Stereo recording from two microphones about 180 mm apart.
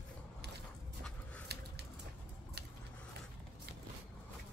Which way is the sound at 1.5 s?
65° right (ahead or behind).